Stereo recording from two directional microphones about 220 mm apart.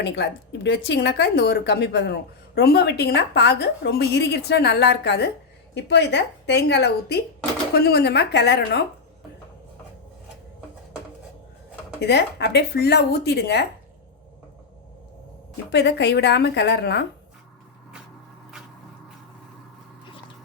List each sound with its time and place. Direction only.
0.0 s a woman's voice: 50° left (ahead or behind)
11.9 s a woman's voice: 50° left (ahead or behind)
15.7 s a woman's voice: 50° left (ahead or behind)